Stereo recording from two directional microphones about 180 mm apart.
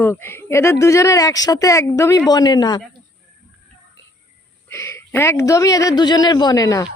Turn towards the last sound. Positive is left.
turn(degrees=20)  # may be behind; listen again after turning